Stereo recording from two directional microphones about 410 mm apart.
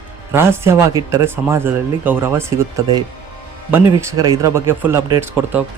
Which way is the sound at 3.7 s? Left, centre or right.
Centre.